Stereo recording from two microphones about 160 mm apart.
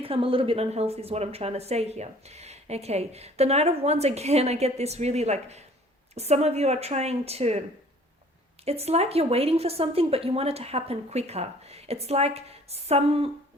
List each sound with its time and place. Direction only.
0.0 s a woman's voice: 35° right (ahead or behind)
8.6 s a woman's voice: 40° right (ahead or behind)